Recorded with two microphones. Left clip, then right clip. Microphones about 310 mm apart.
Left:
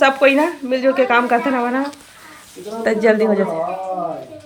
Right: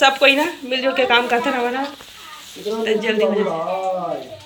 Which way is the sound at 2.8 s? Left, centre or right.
Centre.